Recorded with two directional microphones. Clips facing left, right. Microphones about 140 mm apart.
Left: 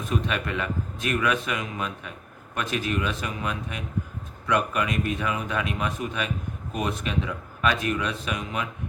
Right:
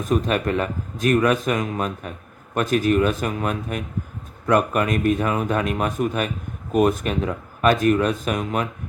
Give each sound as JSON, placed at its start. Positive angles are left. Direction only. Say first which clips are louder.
{"t": 0.0, "sound": "speech", "louder": "right 7 dB", "side_deg": -45}